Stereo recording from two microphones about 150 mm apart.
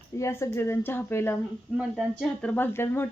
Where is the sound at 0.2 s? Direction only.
20° left (ahead or behind).